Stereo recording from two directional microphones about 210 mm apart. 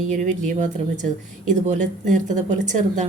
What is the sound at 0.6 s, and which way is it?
Speech, 35° right (ahead or behind).